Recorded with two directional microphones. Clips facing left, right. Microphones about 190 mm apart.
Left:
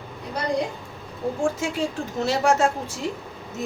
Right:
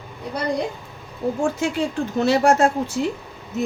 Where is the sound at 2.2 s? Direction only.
60° right (ahead or behind).